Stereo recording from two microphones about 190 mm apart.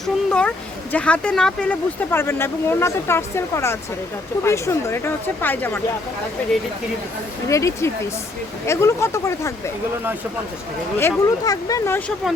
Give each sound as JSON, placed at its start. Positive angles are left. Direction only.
{"t": 0.0, "sound": "a sound", "side_deg": 5}
{"t": 0.9, "sound": "speech", "side_deg": 5}
{"t": 7.4, "sound": "speech", "side_deg": 15}
{"t": 10.9, "sound": "speech", "side_deg": 15}